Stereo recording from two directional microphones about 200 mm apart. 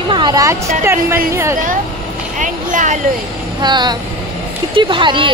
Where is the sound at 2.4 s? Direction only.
40° right (ahead or behind).